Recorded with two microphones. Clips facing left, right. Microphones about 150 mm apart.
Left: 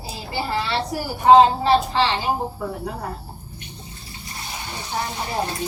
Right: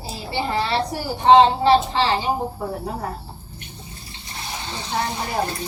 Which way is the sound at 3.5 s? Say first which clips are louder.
Even; 20° left (ahead or behind).